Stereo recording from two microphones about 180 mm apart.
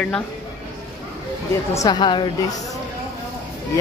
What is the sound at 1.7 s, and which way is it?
Speech, 20° left (ahead or behind).